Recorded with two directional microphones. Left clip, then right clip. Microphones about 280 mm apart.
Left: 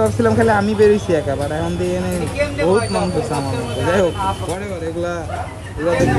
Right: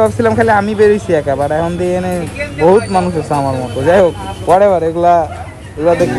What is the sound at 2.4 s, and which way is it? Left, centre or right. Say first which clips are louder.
Speech: right 6 dB; left.